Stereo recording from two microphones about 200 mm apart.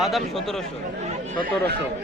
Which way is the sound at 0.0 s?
Centre (ahead or behind).